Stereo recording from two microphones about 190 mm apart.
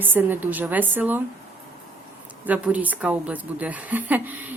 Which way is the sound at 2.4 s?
10° right (ahead or behind).